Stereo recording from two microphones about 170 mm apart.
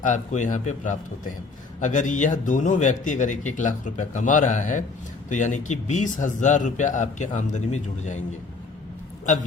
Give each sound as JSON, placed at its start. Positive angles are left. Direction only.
{"t": 0.0, "sound": "speech", "side_deg": 45}